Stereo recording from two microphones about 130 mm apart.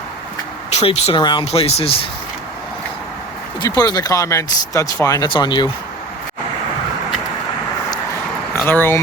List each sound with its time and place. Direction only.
0.7 s speech: 55° left (ahead or behind)
1.1 s speech: 35° left (ahead or behind)
1.5 s speech: 55° left (ahead or behind)
3.6 s speech: 30° left (ahead or behind)
5.3 s speech: 35° left (ahead or behind)
8.6 s speech: 15° left (ahead or behind)